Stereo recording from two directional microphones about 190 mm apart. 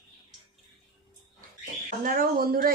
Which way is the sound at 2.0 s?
45° right (ahead or behind).